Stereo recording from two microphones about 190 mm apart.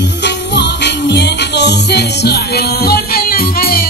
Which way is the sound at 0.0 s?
65° left (ahead or behind).